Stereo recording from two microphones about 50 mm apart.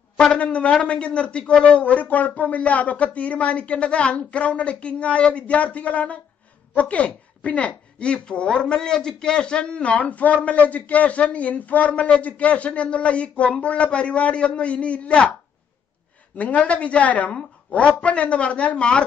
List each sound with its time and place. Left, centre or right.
0.2 s a woman's voice: left
16.3 s a woman's voice: left